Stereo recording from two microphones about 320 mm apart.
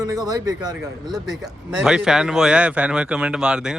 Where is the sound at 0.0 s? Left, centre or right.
Centre.